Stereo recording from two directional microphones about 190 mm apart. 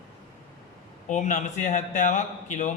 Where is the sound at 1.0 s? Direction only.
40° left (ahead or behind).